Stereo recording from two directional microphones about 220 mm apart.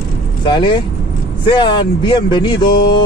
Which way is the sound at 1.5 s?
20° left (ahead or behind).